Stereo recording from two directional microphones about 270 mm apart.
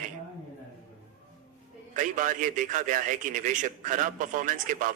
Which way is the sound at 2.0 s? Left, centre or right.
Right.